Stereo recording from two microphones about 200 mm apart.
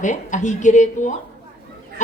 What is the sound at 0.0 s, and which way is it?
Speech, 40° left (ahead or behind).